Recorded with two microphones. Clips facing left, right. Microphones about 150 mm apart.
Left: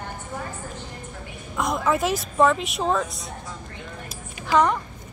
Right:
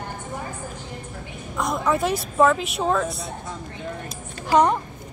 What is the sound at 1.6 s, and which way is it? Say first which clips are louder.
Speech: even; centre (ahead or behind).